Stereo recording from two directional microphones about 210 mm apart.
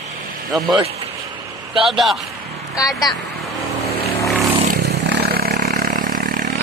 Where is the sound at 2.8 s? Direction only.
20° left (ahead or behind).